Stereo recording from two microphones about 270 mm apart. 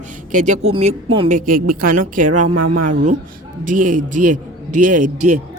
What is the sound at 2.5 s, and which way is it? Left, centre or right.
Speech, right.